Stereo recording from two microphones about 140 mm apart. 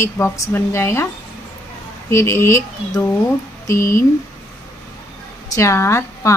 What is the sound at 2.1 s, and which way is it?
Speech, 20° left (ahead or behind).